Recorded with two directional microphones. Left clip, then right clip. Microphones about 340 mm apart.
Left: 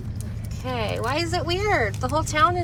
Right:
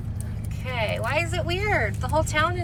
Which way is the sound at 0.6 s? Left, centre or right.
Centre.